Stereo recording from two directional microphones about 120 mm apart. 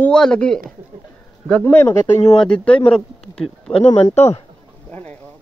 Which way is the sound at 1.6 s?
20° left (ahead or behind).